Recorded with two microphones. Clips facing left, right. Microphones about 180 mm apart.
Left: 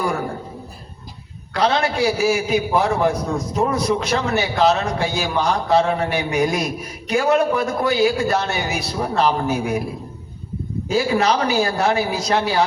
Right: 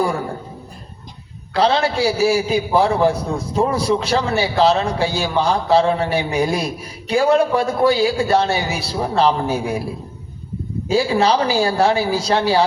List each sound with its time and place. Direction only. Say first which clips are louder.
1.5 s a man's voice: right 2 dB; 30° right (ahead or behind)
10.8 s a man's voice: right 2 dB; 30° right (ahead or behind)